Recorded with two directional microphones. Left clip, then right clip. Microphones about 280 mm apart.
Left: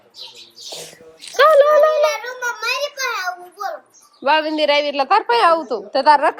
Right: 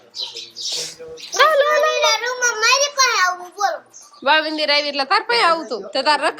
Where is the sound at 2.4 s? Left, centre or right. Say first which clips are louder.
Right 5 dB; right.